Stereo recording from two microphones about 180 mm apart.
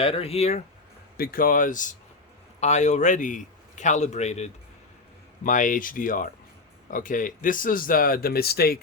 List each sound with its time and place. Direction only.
0.0 s a man's voice: 30° left (ahead or behind)
1.1 s a man's voice: 55° left (ahead or behind)